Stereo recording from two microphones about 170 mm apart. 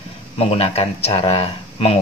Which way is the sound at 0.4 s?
35° left (ahead or behind).